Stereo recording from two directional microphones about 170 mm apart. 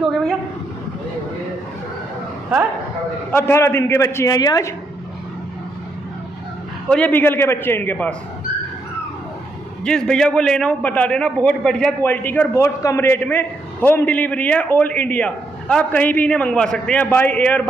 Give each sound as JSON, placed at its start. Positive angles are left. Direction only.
{"t": 0.0, "sound": "a sound", "side_deg": 0}
{"t": 3.3, "sound": "a man's voice", "side_deg": 10}
{"t": 6.9, "sound": "a man's voice", "side_deg": 10}
{"t": 9.8, "sound": "a man's voice", "side_deg": 5}